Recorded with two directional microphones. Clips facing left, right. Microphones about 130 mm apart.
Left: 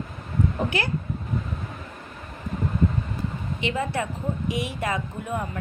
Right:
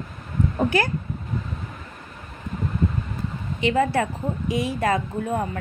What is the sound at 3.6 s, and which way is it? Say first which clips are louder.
A woman's voice: right 7 dB; 35° right (ahead or behind).